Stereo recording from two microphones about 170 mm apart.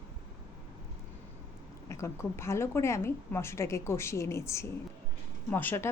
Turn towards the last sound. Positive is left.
turn(degrees=10)  # may be behind; listen again after turning